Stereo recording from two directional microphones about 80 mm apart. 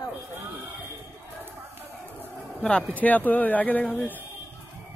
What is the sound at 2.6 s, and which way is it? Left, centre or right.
Speech, centre.